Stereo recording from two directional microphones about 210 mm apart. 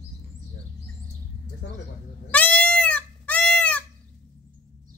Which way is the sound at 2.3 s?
5° left (ahead or behind).